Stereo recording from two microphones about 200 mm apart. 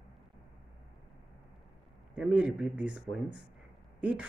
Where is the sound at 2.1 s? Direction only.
5° right (ahead or behind).